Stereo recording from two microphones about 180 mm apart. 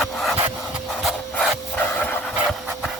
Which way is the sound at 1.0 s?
5° left (ahead or behind).